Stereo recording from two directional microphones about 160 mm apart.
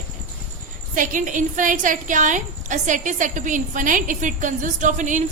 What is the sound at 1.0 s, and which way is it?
A woman's voice, 55° right (ahead or behind).